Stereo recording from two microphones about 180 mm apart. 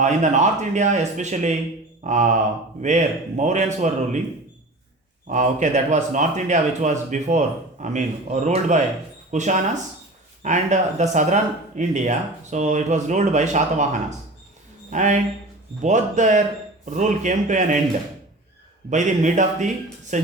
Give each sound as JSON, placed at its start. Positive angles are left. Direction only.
{"t": 0.0, "sound": "speech", "side_deg": -40}
{"t": 5.3, "sound": "speech", "side_deg": -40}
{"t": 14.8, "sound": "speech", "side_deg": -40}
{"t": 18.9, "sound": "speech", "side_deg": -40}